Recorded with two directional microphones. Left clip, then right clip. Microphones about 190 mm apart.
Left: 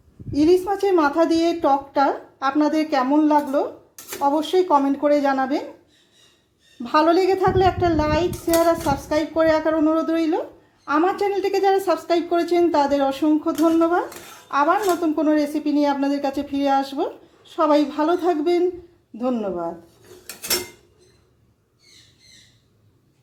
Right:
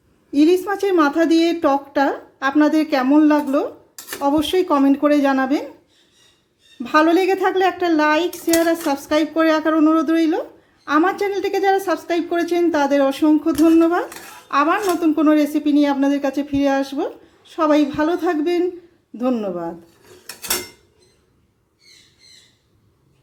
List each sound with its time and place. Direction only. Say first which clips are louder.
0.3 s a child's voice: right 2 dB; 15° right (ahead or behind)
6.8 s a child's voice: right 2 dB; 20° right (ahead or behind)